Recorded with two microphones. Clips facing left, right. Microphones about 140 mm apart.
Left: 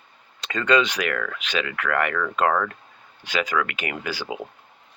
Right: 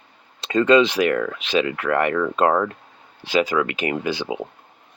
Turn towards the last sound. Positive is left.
turn(degrees=-20)  # may be behind; listen again after turning